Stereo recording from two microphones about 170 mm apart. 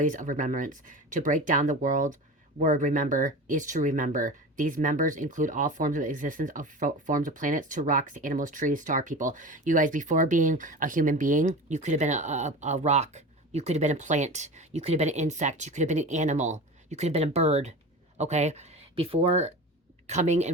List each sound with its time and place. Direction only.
0.0 s speech: 50° right (ahead or behind)